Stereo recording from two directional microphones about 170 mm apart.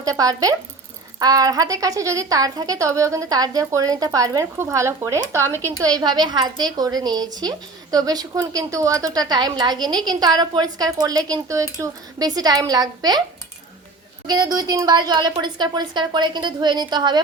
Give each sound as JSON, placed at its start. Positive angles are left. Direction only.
{"t": 0.0, "sound": "a woman's voice", "side_deg": -20}
{"t": 14.3, "sound": "a woman's voice", "side_deg": -20}